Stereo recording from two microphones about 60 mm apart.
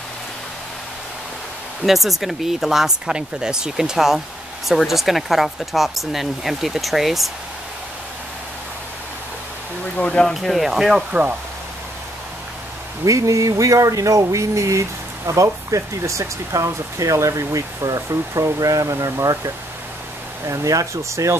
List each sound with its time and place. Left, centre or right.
1.9 s speech: centre
9.9 s speech: centre
10.2 s speech: centre
13.0 s speech: right